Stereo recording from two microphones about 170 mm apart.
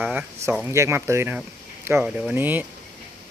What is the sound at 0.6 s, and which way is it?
Speech, 15° right (ahead or behind).